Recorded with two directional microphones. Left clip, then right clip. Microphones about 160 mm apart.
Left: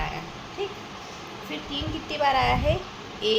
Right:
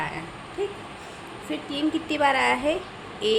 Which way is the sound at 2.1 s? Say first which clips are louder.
Even; 30° right (ahead or behind).